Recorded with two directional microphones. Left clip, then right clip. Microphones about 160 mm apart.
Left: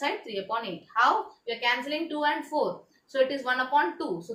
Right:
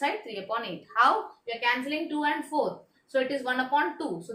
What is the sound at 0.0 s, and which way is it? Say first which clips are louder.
A woman's voice: even; 25° right (ahead or behind).